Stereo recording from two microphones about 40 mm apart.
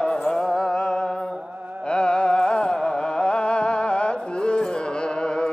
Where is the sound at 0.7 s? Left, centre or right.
Left.